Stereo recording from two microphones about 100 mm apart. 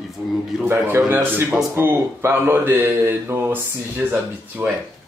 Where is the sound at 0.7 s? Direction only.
20° right (ahead or behind).